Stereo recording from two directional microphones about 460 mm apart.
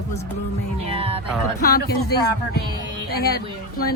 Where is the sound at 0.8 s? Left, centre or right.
Centre.